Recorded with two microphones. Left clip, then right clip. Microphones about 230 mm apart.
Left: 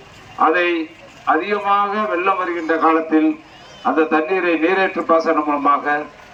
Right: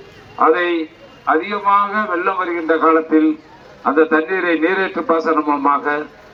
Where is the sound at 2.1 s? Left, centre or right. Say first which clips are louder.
Even; centre.